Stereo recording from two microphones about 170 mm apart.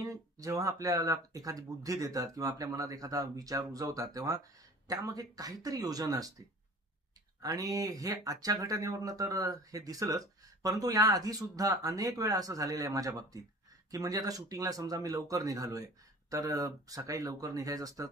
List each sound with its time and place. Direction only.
0.0 s speech: 20° right (ahead or behind)
7.5 s speech: 20° right (ahead or behind)